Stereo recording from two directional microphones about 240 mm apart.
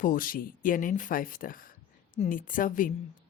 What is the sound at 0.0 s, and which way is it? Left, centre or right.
A woman's voice, left.